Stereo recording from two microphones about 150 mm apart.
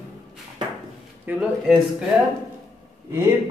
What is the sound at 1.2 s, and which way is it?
Speech, 10° right (ahead or behind).